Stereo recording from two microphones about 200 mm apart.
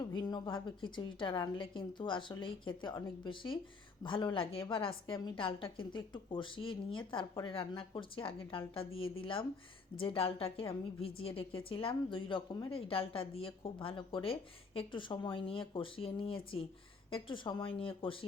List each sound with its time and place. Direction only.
0.1 s a woman's voice: 20° left (ahead or behind)